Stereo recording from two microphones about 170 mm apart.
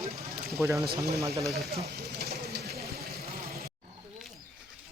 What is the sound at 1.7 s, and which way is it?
Vehicle, 65° right (ahead or behind).